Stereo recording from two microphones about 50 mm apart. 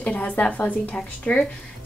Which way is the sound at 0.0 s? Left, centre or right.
Left.